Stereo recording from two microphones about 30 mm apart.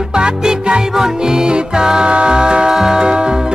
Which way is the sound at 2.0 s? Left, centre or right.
Right.